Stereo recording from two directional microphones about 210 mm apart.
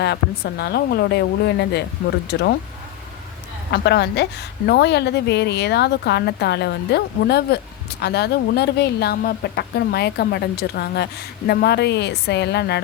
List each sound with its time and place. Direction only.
0.0 s speech: 50° left (ahead or behind)
3.7 s speech: 50° left (ahead or behind)